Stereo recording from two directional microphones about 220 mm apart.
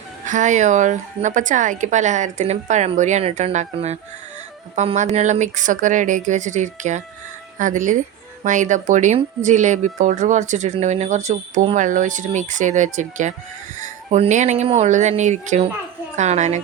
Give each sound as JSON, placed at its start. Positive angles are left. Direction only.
{"t": 0.3, "sound": "speech", "side_deg": -35}